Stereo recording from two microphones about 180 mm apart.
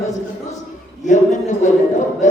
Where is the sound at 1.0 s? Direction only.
45° left (ahead or behind).